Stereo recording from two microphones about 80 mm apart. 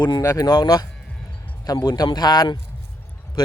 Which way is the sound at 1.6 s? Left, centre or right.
Left.